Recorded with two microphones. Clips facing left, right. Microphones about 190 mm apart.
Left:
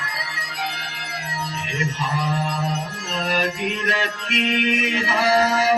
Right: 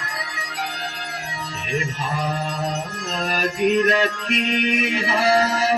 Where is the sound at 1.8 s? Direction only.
45° right (ahead or behind).